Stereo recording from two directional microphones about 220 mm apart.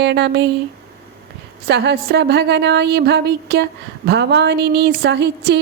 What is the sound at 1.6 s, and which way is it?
A woman's voice, 50° right (ahead or behind).